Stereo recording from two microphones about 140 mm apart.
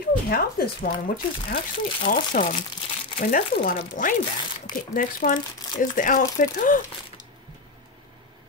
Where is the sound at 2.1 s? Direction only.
70° left (ahead or behind).